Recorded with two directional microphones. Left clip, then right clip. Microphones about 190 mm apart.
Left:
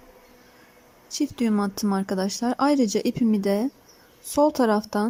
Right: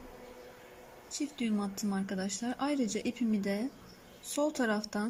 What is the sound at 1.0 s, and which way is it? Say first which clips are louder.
Speech: left 11 dB; 30° left (ahead or behind).